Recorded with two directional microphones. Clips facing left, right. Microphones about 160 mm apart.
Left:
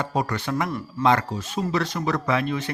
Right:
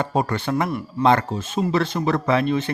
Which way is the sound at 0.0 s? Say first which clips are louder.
Right 3 dB; 30° right (ahead or behind).